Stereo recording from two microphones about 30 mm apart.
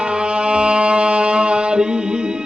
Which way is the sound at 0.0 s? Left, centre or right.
Right.